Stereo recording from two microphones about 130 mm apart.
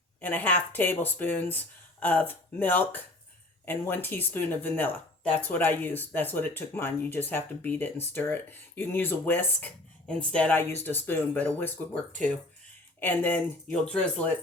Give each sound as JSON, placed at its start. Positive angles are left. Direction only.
{"t": 0.2, "sound": "speech", "side_deg": 15}
{"t": 13.0, "sound": "speech", "side_deg": 15}